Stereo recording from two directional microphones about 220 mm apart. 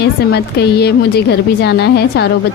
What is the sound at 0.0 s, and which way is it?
A woman's voice, 50° left (ahead or behind).